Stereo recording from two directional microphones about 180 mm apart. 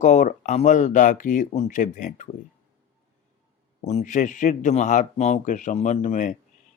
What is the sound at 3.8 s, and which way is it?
Speech, 40° left (ahead or behind).